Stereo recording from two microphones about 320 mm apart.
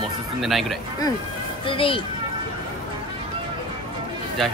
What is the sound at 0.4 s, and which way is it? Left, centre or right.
Speech, centre.